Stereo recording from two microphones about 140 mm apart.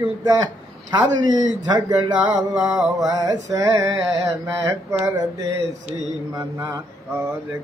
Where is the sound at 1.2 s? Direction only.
30° right (ahead or behind).